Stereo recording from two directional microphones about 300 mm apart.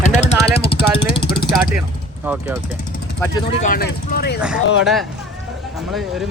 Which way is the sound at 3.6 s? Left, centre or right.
Left.